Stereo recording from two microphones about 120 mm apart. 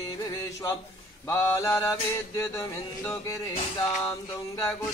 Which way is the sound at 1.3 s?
20° left (ahead or behind).